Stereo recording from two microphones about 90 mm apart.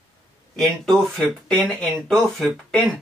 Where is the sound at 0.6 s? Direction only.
Centre (ahead or behind).